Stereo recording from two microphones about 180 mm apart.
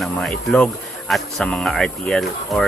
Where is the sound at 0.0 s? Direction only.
5° left (ahead or behind).